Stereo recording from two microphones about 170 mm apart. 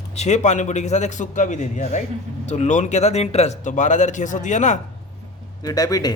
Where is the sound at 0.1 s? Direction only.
40° left (ahead or behind).